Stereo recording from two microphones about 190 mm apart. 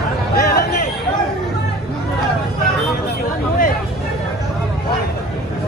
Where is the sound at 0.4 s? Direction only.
55° left (ahead or behind).